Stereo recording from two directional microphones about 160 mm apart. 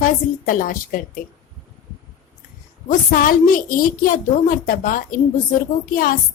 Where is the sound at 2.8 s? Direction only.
60° left (ahead or behind).